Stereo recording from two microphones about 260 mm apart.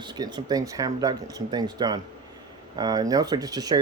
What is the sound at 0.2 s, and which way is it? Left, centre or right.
Speech, centre.